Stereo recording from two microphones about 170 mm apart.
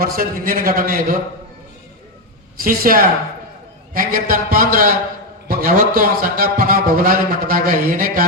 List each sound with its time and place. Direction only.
0.0 s a man's voice: 60° right (ahead or behind)
2.6 s a man's voice: 55° right (ahead or behind)